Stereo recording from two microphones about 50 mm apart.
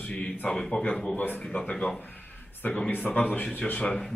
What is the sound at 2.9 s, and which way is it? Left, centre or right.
Speech, left.